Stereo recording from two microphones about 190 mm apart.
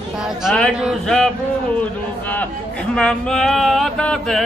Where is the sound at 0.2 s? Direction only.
5° right (ahead or behind).